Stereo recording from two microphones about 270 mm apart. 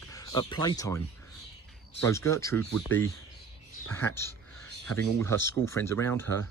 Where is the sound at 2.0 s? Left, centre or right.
Centre.